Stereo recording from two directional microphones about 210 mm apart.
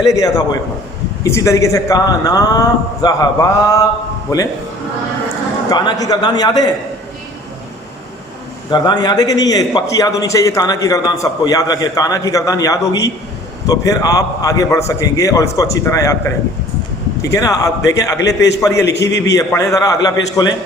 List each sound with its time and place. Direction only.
0.1 s a man's voice: 15° left (ahead or behind)
5.6 s a man's voice: 20° left (ahead or behind)
8.7 s a man's voice: 20° left (ahead or behind)
17.3 s a man's voice: 15° left (ahead or behind)